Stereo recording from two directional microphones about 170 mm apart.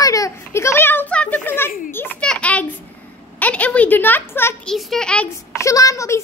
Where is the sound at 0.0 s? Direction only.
20° left (ahead or behind).